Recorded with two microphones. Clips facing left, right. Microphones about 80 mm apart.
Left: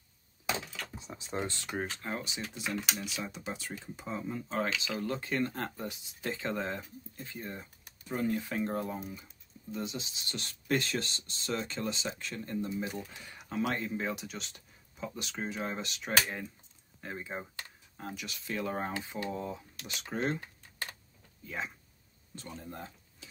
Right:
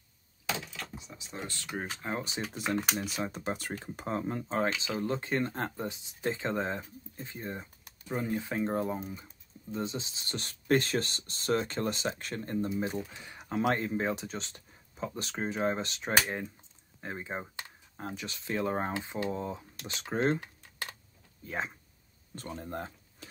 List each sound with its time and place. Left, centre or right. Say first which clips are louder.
0.9 s a sound: left 5 dB; left
1.4 s speech: left 3 dB; left
2.0 s speech: right 3 dB; right
2.5 s speech: right 5 dB; right
4.7 s speech: right 2 dB; right
12.7 s speech: right 3 dB; right
21.4 s speech: right 3 dB; right